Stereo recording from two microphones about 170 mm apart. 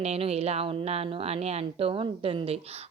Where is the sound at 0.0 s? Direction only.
35° right (ahead or behind).